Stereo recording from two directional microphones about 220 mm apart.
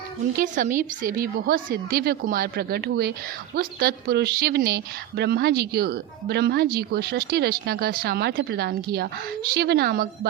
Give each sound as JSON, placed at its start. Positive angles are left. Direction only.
{"t": 0.3, "sound": "a woman's voice", "side_deg": -35}